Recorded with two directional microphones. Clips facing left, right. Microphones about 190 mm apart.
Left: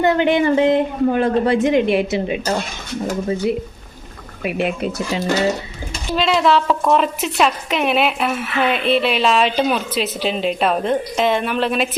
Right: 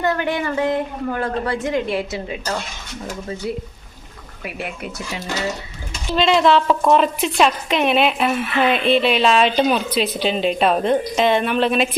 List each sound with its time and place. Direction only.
0.0 s a woman's voice: 20° left (ahead or behind)
6.1 s speech: 5° left (ahead or behind)